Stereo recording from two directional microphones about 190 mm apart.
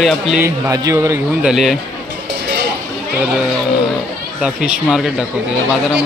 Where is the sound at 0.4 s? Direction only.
15° right (ahead or behind).